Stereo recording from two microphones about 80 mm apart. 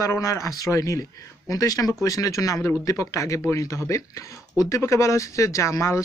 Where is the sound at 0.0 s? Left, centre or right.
Left.